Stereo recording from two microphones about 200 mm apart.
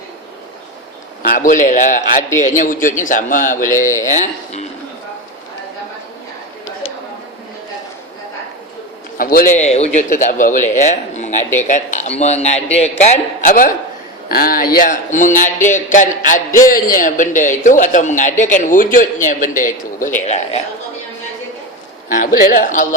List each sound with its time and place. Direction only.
1.3 s a man's voice: 40° left (ahead or behind)
3.7 s mantra: 15° left (ahead or behind)
4.0 s a man's voice: 35° left (ahead or behind)
9.1 s a man's voice: 45° left (ahead or behind)
9.6 s a man's voice: 35° left (ahead or behind)
22.1 s a man's voice: 40° left (ahead or behind)